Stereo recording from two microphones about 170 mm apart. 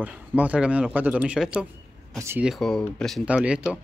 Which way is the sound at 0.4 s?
10° right (ahead or behind).